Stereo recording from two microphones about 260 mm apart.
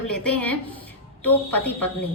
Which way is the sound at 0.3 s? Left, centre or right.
Centre.